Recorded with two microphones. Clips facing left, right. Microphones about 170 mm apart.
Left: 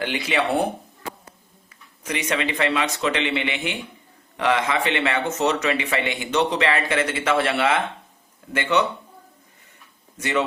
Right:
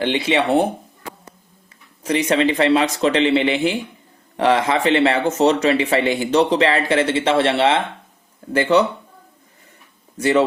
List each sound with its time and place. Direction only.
0.0 s speech: 25° right (ahead or behind)
2.0 s speech: 35° right (ahead or behind)
10.2 s speech: 35° right (ahead or behind)